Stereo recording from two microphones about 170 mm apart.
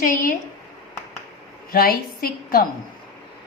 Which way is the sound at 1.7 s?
60° left (ahead or behind).